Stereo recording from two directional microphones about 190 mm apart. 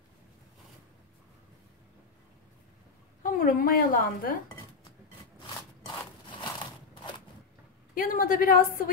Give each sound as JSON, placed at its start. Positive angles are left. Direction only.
{"t": 3.2, "sound": "a woman's voice", "side_deg": 45}
{"t": 6.4, "sound": "crushing", "side_deg": 25}
{"t": 7.9, "sound": "a woman's voice", "side_deg": 45}